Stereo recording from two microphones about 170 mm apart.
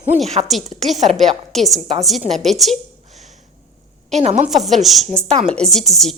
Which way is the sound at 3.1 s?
40° right (ahead or behind).